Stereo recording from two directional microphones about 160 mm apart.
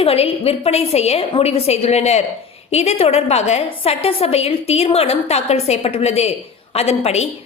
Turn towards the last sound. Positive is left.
turn(degrees=40)  # may be behind; listen again after turning